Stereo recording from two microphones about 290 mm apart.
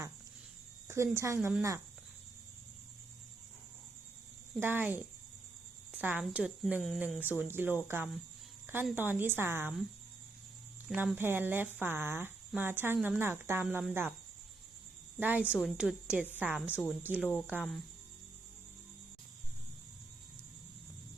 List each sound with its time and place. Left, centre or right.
0.9 s speech: centre
4.6 s a woman's voice: centre
10.8 s speech: centre
15.2 s a woman's voice: centre